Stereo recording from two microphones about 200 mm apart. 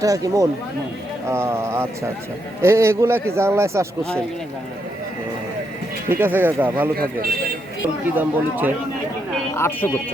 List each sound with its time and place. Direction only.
0.0 s a man's voice: 15° right (ahead or behind)
6.1 s a man's voice: 10° right (ahead or behind)
8.1 s a man's voice: 10° right (ahead or behind)
9.6 s speech: 10° left (ahead or behind)